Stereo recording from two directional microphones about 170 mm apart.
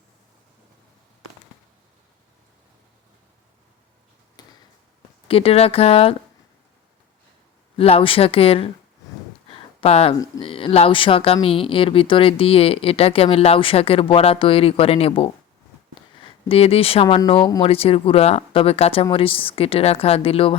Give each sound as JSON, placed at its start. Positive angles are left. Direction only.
{"t": 4.4, "sound": "basketball bounce", "side_deg": 25}
{"t": 5.3, "sound": "speech", "side_deg": 35}
{"t": 7.8, "sound": "speech", "side_deg": 35}
{"t": 9.5, "sound": "a sound", "side_deg": 35}
{"t": 10.2, "sound": "speech", "side_deg": 25}